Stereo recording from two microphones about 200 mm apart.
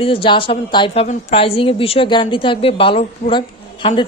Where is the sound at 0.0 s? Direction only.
25° left (ahead or behind).